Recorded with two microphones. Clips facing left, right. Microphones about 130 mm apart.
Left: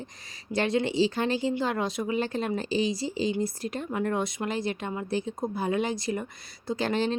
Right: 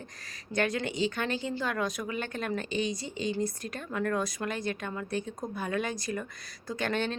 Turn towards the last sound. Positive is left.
turn(degrees=30)  # may be behind; listen again after turning